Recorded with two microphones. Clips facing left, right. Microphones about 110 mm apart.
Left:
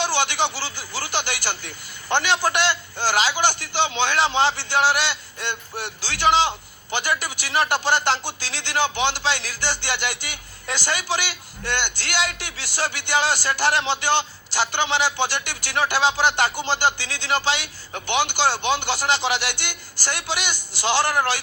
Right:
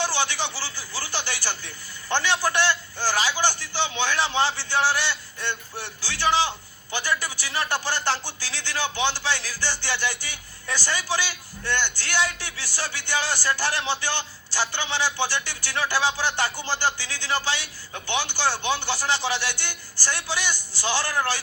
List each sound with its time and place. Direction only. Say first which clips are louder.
0.0 s a man's voice: left 4 dB; 20° left (ahead or behind)